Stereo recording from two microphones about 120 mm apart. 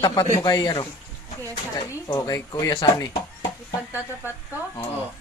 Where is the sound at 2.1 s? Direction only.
30° left (ahead or behind).